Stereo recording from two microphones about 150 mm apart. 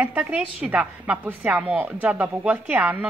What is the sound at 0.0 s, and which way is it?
Speech, 10° right (ahead or behind).